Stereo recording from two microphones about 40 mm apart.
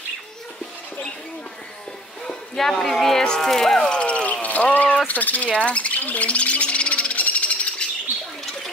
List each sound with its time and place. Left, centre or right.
2.2 s speech: centre
3.9 s a sound: left
5.0 s speech: left
5.5 s speech: left
5.9 s speech: left
6.2 s bird: left
7.8 s bird: left